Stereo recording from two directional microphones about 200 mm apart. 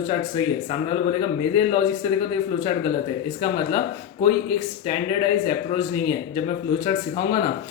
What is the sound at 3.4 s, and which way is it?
Speech, 25° left (ahead or behind).